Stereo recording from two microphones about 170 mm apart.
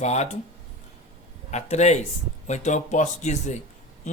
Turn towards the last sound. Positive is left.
turn(degrees=45)  # may be behind; listen again after turning